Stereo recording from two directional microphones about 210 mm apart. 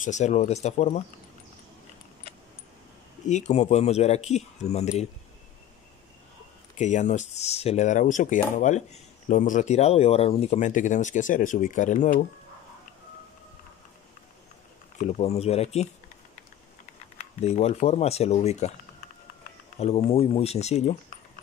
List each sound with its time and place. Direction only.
0.0 s speech: 35° left (ahead or behind)
3.3 s speech: 35° left (ahead or behind)
6.8 s speech: 35° left (ahead or behind)
15.0 s speech: 35° left (ahead or behind)
17.2 s speech: 30° left (ahead or behind)
19.8 s speech: 30° left (ahead or behind)